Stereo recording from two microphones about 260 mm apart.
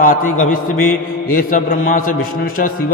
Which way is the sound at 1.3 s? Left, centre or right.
Left.